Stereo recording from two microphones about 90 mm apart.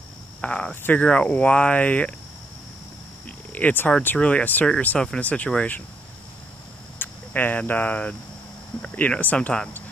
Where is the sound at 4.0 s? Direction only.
20° left (ahead or behind).